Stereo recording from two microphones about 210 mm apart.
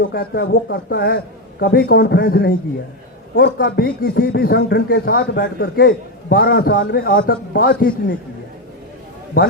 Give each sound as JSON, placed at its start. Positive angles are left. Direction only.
{"t": 0.1, "sound": "a man's voice", "side_deg": 45}